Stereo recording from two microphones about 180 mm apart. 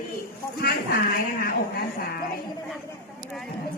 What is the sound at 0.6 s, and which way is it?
Speech, 55° left (ahead or behind).